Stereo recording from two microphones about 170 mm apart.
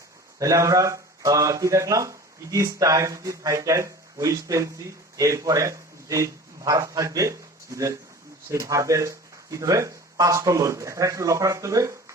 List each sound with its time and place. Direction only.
0.3 s a man's voice: 20° right (ahead or behind)